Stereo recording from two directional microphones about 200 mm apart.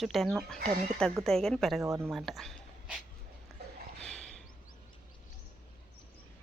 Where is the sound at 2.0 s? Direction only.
Centre (ahead or behind).